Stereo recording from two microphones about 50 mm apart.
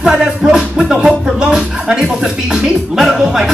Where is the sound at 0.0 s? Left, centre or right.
Centre.